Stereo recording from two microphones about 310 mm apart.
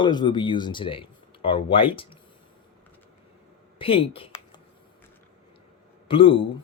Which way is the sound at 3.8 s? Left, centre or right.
Centre.